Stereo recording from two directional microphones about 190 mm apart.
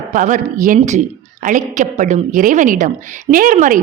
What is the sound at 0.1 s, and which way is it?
A woman's voice, 45° right (ahead or behind).